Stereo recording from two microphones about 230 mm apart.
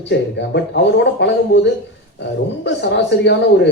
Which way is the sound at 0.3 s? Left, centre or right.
Left.